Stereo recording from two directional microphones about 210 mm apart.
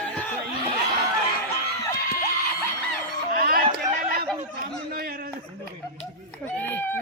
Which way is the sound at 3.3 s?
45° right (ahead or behind).